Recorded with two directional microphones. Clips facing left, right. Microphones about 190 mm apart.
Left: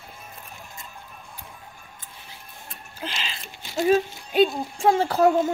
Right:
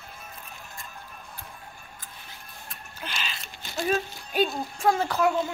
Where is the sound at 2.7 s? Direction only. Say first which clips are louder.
Left 4 dB; 30° left (ahead or behind).